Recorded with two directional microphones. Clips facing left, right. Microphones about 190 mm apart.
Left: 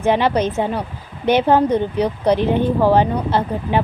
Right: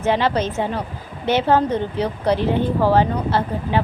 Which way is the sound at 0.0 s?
15° left (ahead or behind).